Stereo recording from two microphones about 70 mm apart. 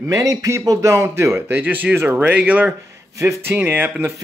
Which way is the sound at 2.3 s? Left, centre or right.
Right.